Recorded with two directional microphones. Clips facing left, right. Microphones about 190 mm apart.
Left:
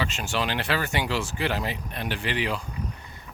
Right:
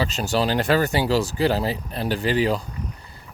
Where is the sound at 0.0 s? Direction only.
35° right (ahead or behind).